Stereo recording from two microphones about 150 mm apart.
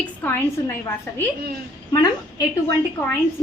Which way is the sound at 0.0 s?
15° left (ahead or behind).